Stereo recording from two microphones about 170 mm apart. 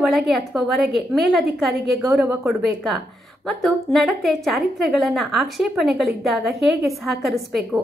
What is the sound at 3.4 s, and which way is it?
A woman's voice, centre (ahead or behind).